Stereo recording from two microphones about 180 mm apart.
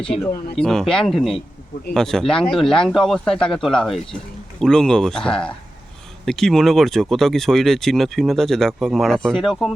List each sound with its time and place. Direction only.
0.5 s speech: 5° left (ahead or behind)